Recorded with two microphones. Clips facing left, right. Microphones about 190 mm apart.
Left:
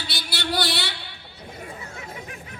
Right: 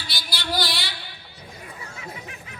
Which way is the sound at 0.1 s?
65° left (ahead or behind).